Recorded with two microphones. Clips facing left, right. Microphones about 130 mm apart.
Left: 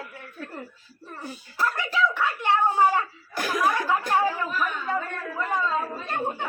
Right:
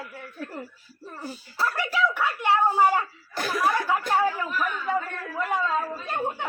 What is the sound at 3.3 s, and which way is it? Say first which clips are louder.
Chuckle: left 1 dB; 15° left (ahead or behind).